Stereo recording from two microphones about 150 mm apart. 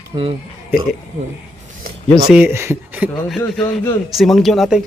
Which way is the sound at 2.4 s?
15° right (ahead or behind).